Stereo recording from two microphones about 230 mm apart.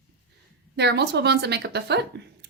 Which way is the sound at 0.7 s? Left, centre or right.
Right.